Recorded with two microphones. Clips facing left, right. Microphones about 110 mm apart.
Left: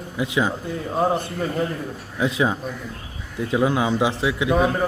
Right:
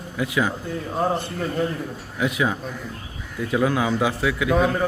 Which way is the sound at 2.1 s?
25° left (ahead or behind).